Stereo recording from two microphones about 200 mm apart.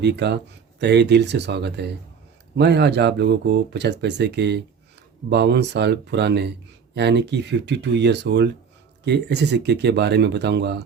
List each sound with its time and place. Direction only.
0.0 s speech: 60° right (ahead or behind)